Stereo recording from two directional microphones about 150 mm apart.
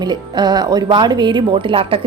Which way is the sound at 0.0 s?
30° right (ahead or behind).